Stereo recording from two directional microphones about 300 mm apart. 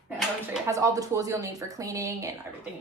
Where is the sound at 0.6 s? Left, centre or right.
Centre.